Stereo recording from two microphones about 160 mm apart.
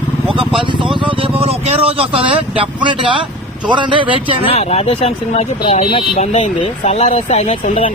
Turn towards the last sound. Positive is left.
turn(degrees=40)  # may be behind; listen again after turning